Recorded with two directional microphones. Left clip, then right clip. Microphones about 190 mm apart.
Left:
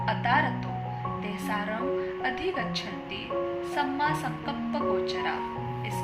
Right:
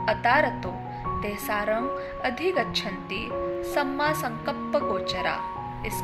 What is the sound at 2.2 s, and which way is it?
Speech, 40° right (ahead or behind).